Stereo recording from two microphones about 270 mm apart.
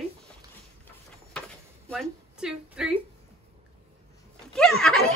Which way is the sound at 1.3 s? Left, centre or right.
Centre.